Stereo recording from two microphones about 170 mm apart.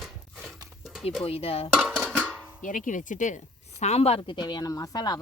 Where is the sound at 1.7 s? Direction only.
5° right (ahead or behind).